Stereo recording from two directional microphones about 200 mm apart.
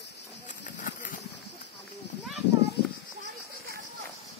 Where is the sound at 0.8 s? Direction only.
40° left (ahead or behind).